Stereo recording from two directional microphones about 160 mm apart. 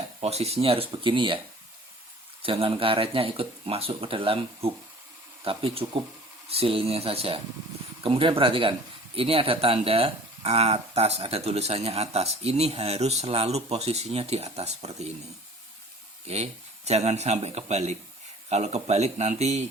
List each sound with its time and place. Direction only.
0.2 s speech: 40° right (ahead or behind)
2.4 s speech: 35° right (ahead or behind)
16.2 s speech: 40° right (ahead or behind)